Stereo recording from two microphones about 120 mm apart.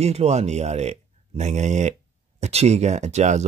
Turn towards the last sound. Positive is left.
turn(degrees=-70)  # may be behind; listen again after turning